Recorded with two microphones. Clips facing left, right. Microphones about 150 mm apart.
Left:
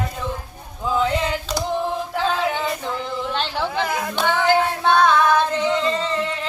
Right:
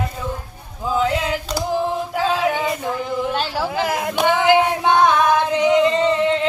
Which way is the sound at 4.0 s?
15° right (ahead or behind).